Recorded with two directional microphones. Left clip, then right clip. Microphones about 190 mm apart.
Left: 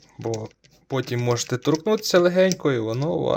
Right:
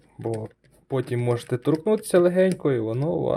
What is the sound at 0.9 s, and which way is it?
Speech, 10° right (ahead or behind).